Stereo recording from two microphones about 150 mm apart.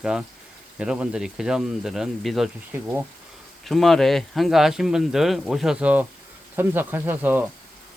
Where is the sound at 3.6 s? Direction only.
Centre (ahead or behind).